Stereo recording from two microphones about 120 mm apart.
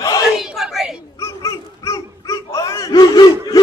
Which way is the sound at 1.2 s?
25° left (ahead or behind).